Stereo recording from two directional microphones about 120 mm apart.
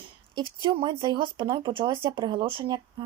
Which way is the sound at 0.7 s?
40° right (ahead or behind).